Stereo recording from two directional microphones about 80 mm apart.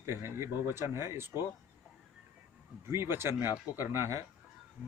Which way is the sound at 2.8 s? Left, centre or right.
Right.